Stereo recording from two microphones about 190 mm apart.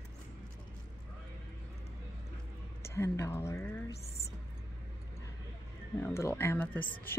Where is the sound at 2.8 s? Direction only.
15° left (ahead or behind).